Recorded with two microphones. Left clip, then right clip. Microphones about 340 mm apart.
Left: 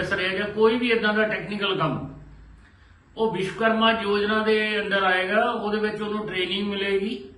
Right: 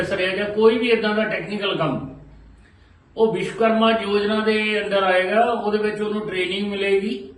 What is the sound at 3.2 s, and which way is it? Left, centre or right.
A man's voice, centre.